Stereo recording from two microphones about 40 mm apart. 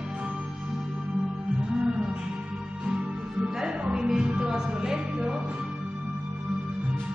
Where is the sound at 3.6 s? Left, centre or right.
Right.